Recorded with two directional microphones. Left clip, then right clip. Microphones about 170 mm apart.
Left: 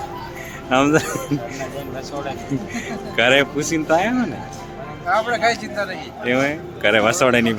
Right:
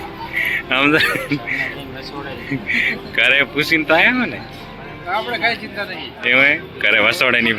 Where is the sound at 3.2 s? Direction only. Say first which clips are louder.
Right 1 dB; 15° left (ahead or behind).